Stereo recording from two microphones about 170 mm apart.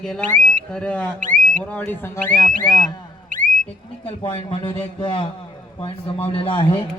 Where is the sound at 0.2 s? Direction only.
45° right (ahead or behind).